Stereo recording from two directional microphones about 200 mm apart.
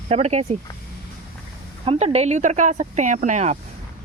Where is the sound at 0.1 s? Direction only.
35° right (ahead or behind).